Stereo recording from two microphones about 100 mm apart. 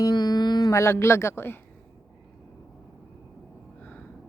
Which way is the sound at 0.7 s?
25° left (ahead or behind).